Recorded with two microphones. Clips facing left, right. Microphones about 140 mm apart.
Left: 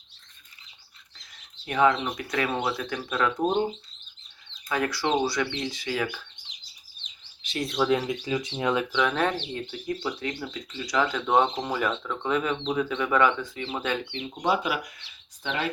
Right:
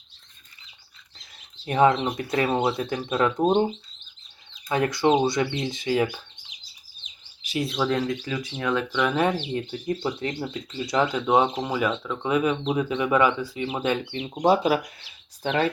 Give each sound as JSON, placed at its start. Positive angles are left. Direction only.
{"t": 1.6, "sound": "speech", "side_deg": -30}
{"t": 4.7, "sound": "speech", "side_deg": -20}
{"t": 7.0, "sound": "bird", "side_deg": -5}
{"t": 7.9, "sound": "speech", "side_deg": 15}
{"t": 8.9, "sound": "speech", "side_deg": -5}
{"t": 9.8, "sound": "speech", "side_deg": -25}
{"t": 11.1, "sound": "speech", "side_deg": -10}
{"t": 14.1, "sound": "speech", "side_deg": -40}